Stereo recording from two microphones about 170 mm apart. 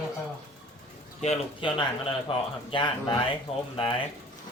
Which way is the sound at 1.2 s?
40° left (ahead or behind).